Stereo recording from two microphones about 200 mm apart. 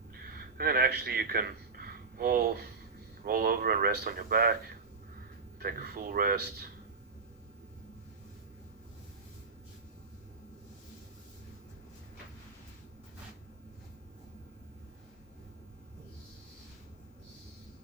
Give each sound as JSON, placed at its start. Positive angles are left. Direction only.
{"t": 0.3, "sound": "a sound", "side_deg": -50}
{"t": 3.2, "sound": "speech", "side_deg": -45}
{"t": 5.5, "sound": "speech", "side_deg": -50}